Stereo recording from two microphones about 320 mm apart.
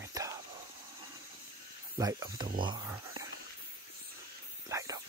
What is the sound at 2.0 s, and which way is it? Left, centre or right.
Speech, centre.